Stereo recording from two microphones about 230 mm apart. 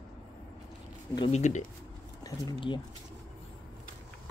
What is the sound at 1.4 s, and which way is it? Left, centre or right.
Speech, left.